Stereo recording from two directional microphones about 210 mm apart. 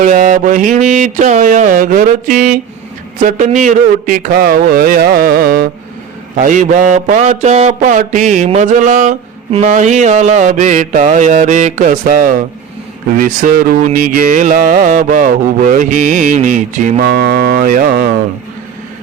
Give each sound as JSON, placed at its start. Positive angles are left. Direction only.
{"t": 0.0, "sound": "a man's voice", "side_deg": -40}